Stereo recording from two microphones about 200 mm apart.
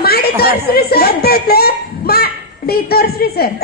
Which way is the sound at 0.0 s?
50° left (ahead or behind).